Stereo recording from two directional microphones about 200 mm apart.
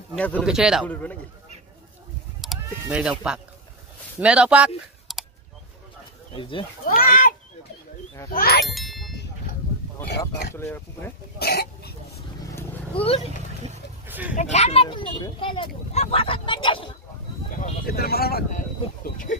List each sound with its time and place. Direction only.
0.1 s a man's voice: 5° left (ahead or behind)
2.4 s chicken: 5° right (ahead or behind)
4.2 s speech: 5° right (ahead or behind)
6.3 s speech: 25° left (ahead or behind)
6.8 s speech: 45° left (ahead or behind)
8.6 s ding: centre (ahead or behind)
10.5 s speech: 15° left (ahead or behind)
11.3 s cough: 50° left (ahead or behind)
12.9 s speech: 30° left (ahead or behind)
14.0 s a sound: 10° right (ahead or behind)
14.3 s speech: 35° left (ahead or behind)
17.6 s speech: 45° left (ahead or behind)